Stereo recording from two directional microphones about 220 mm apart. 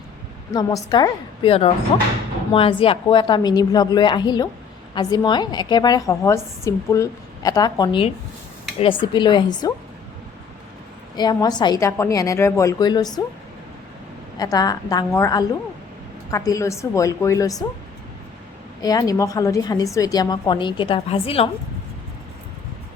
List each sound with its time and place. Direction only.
0.5 s a woman's voice: 20° left (ahead or behind)
11.2 s a woman's voice: 20° left (ahead or behind)
14.3 s a woman's voice: 15° left (ahead or behind)
18.8 s a woman's voice: 15° left (ahead or behind)